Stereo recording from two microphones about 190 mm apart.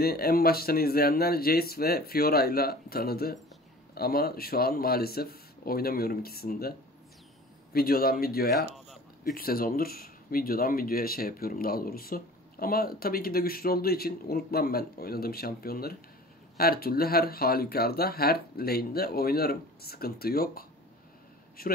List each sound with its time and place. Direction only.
0.0 s speech: 55° left (ahead or behind)
7.7 s speech: 50° left (ahead or behind)
8.7 s a sound: centre (ahead or behind)
9.2 s speech: 50° left (ahead or behind)